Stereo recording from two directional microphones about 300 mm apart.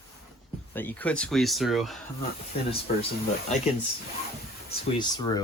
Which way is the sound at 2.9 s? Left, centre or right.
Left.